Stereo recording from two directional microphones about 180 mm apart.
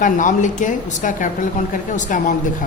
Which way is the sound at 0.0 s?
45° left (ahead or behind).